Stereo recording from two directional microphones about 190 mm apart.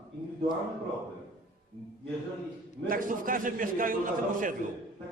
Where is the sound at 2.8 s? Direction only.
45° right (ahead or behind).